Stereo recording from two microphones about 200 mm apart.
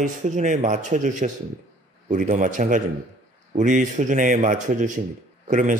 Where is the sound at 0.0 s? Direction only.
40° right (ahead or behind).